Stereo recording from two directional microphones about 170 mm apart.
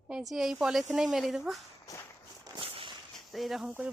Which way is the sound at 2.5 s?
30° right (ahead or behind).